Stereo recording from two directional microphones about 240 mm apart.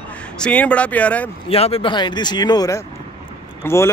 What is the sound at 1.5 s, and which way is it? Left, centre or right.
Speech, left.